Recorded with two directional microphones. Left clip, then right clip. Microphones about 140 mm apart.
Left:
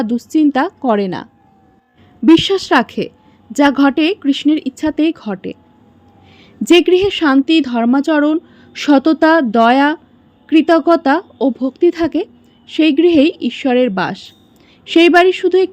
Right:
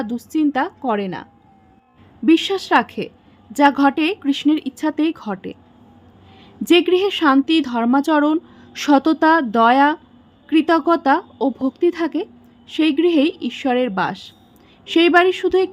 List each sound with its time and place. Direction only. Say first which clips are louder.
0.0 s a woman's voice: left 6 dB; 20° left (ahead or behind)